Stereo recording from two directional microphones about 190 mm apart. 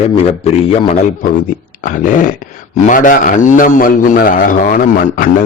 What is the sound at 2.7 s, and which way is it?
A man's voice, 40° left (ahead or behind).